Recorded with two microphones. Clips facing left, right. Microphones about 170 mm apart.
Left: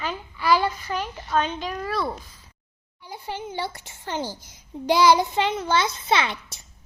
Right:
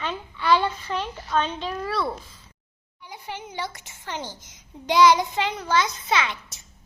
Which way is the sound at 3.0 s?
30° left (ahead or behind).